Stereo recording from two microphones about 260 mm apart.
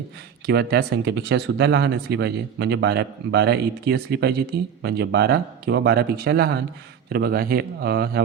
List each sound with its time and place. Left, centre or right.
0.4 s speech: right